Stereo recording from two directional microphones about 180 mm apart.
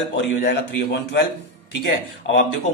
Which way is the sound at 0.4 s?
70° left (ahead or behind).